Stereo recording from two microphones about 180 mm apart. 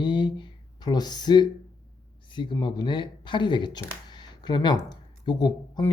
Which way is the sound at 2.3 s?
25° left (ahead or behind).